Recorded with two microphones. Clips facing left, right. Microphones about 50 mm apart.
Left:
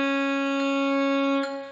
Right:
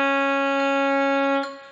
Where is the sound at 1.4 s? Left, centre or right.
Centre.